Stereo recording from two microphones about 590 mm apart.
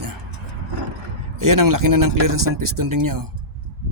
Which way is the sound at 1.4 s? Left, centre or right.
Right.